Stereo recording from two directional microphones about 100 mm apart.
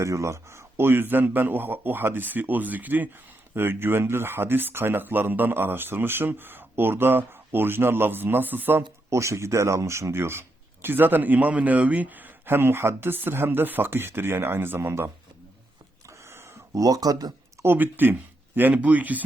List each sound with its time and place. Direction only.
0.0 s speech: 30° right (ahead or behind)
9.0 s speech: 30° right (ahead or behind)
16.0 s a sound: 30° right (ahead or behind)
17.6 s speech: 20° right (ahead or behind)